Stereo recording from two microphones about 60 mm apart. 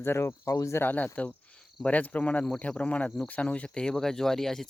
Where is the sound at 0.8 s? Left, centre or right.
Left.